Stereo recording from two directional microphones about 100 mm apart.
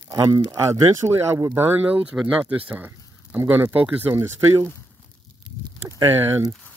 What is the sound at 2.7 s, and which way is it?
Speech, 20° right (ahead or behind).